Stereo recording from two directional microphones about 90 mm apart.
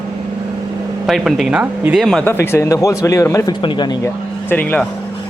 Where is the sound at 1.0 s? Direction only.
5° right (ahead or behind).